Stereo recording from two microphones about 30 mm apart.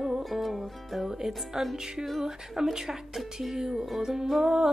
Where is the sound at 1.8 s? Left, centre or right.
Centre.